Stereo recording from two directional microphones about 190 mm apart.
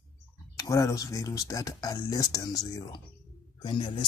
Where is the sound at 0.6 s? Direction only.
15° left (ahead or behind).